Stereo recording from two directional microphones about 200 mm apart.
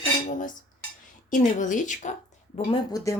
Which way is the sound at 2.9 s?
15° left (ahead or behind).